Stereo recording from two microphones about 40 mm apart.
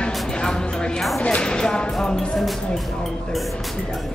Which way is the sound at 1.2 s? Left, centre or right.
Centre.